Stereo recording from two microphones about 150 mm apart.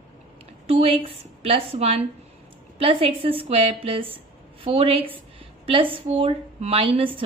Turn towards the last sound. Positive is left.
turn(degrees=-35)  # may be behind; listen again after turning